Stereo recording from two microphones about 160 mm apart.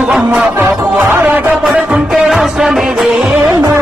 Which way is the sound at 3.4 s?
20° right (ahead or behind).